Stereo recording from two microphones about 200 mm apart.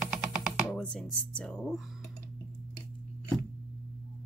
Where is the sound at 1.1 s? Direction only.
5° left (ahead or behind).